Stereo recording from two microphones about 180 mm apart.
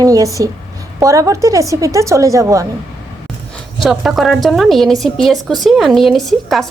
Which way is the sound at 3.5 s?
Centre (ahead or behind).